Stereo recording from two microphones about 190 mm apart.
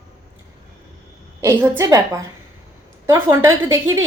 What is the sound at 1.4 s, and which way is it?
Speech, 15° right (ahead or behind).